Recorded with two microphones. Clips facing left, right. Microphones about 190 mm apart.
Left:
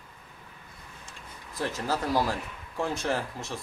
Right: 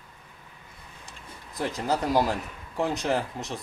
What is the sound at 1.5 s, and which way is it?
Speech, 15° right (ahead or behind).